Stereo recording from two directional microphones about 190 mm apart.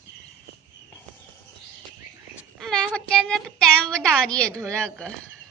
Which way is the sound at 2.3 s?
5° right (ahead or behind).